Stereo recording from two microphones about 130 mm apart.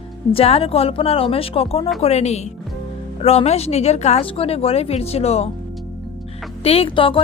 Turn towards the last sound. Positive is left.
turn(degrees=40)  # may be behind; listen again after turning